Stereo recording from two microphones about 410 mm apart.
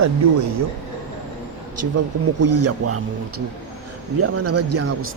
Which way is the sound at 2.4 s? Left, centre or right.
Right.